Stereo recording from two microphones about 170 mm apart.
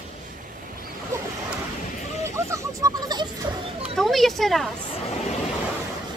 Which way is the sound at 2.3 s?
20° right (ahead or behind).